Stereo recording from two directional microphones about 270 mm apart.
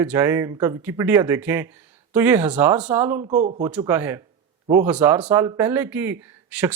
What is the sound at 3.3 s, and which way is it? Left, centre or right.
Speech, right.